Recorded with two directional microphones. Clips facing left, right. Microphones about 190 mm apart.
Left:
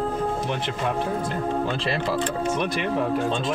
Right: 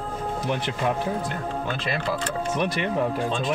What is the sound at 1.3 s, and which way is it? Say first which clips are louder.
Speech: left 4 dB; 30° left (ahead or behind).